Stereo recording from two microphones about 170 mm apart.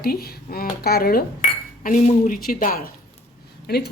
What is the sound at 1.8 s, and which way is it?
Speech, 50° left (ahead or behind).